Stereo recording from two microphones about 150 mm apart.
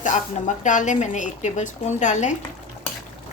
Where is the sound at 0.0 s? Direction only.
55° left (ahead or behind).